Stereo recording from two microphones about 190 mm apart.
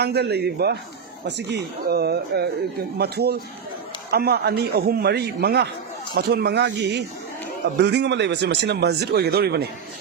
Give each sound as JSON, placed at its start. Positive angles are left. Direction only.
{"t": 0.0, "sound": "speech", "side_deg": -60}